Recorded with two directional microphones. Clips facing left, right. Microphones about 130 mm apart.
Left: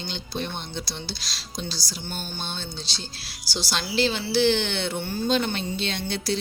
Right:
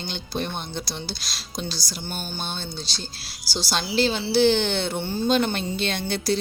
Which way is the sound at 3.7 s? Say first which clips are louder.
Right 2 dB; 40° right (ahead or behind).